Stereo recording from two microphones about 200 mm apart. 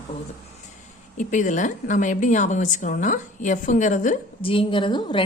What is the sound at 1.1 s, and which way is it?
A woman's voice, 40° left (ahead or behind).